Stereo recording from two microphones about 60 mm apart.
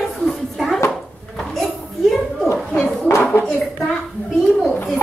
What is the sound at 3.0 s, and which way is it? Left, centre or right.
Speech, left.